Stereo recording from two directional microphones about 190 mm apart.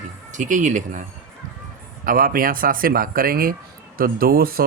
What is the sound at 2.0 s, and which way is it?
Speech, 45° right (ahead or behind).